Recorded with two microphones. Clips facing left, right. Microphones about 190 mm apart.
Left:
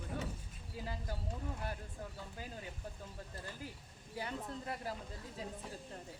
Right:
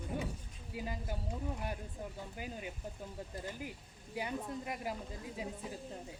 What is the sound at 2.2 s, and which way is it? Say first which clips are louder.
A woman's voice: right 4 dB; 15° right (ahead or behind).